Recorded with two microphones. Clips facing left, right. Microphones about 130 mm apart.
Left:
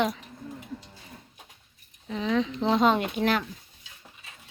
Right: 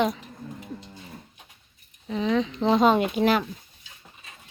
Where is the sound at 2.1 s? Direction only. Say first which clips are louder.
Right 2 dB; centre (ahead or behind).